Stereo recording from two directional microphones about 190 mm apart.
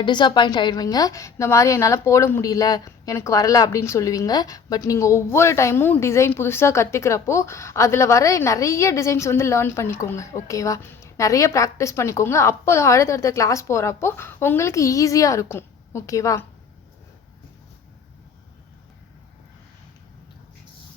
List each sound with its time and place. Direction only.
0.0 s a woman's voice: 25° left (ahead or behind)